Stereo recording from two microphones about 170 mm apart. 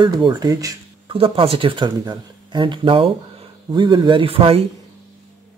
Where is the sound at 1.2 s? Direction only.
35° right (ahead or behind).